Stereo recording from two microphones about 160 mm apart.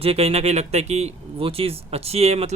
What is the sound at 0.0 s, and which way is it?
Speech, 40° right (ahead or behind).